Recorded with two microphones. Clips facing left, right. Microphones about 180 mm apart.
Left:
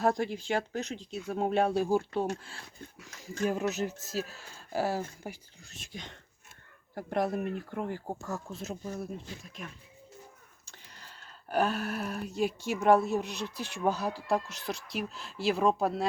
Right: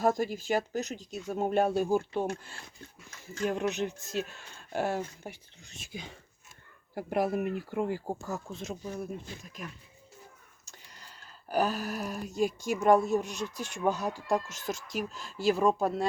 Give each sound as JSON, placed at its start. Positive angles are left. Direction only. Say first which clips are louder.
{"t": 0.0, "sound": "speech", "louder": "right 1 dB", "side_deg": -5}
{"t": 10.9, "sound": "a sound", "louder": "left 1 dB", "side_deg": 0}
{"t": 12.6, "sound": "speech", "louder": "even", "side_deg": 0}
{"t": 14.7, "sound": "speech", "louder": "right 1 dB", "side_deg": -45}
{"t": 15.1, "sound": "speech", "louder": "right 3 dB", "side_deg": 0}